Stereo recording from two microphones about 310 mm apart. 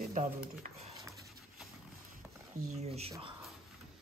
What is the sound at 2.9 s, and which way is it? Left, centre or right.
Speech, centre.